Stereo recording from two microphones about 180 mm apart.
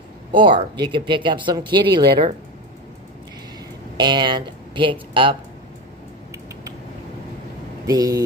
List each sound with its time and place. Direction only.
0.3 s speech: 30° right (ahead or behind)
3.9 s speech: 25° right (ahead or behind)
7.8 s speech: 20° right (ahead or behind)